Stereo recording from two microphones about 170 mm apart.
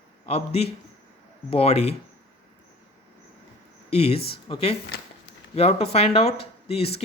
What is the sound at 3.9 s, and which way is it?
A man's voice, 35° left (ahead or behind).